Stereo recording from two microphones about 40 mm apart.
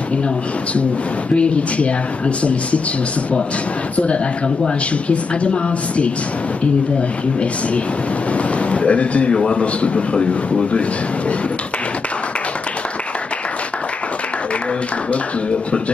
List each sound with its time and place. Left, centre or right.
1.3 s speech: left
3.9 s speech: left
8.6 s a man's voice: left